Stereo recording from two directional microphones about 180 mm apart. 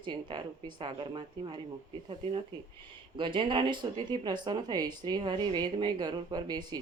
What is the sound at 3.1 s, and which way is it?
Speech, 30° right (ahead or behind).